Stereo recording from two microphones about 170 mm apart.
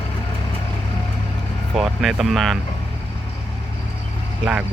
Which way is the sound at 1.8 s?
Centre (ahead or behind).